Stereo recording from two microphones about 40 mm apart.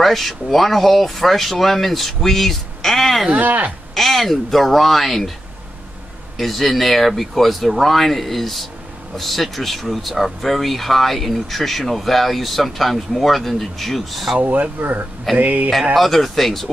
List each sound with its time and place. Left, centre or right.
0.0 s speech: centre
3.3 s speech: right
3.9 s speech: centre
6.3 s speech: centre
14.4 s speech: right
15.9 s speech: centre